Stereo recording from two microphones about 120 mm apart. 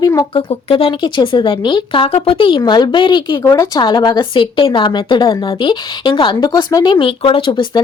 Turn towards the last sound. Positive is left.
turn(degrees=40)  # may be behind; listen again after turning